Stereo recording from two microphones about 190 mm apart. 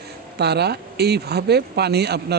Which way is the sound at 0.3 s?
60° right (ahead or behind).